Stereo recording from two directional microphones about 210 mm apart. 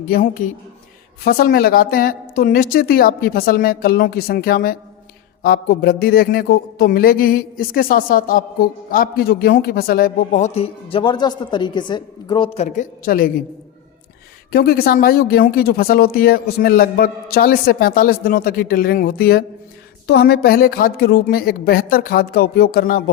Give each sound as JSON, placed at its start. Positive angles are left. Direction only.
{"t": 0.1, "sound": "a man's voice", "side_deg": 40}
{"t": 14.5, "sound": "speech", "side_deg": 45}